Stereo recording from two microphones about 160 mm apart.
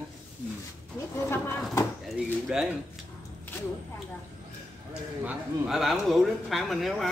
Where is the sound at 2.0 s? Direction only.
5° right (ahead or behind).